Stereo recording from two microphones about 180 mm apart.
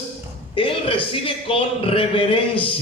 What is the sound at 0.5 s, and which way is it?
A man's voice, 30° left (ahead or behind).